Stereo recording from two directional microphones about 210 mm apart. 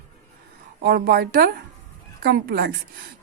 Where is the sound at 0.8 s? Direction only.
45° right (ahead or behind).